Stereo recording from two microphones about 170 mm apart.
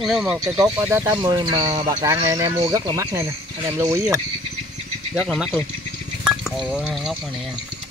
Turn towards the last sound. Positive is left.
turn(degrees=0)  # may be behind; listen again after turning